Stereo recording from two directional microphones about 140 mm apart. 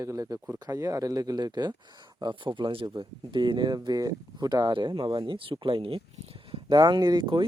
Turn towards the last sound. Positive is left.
turn(degrees=-35)  # may be behind; listen again after turning